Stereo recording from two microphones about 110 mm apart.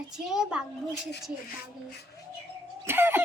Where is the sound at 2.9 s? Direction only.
20° right (ahead or behind).